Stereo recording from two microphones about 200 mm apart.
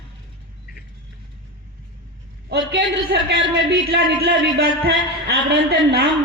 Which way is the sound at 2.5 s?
55° right (ahead or behind).